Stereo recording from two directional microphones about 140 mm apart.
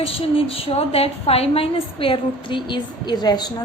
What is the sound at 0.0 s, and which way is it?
A woman's voice, 40° left (ahead or behind).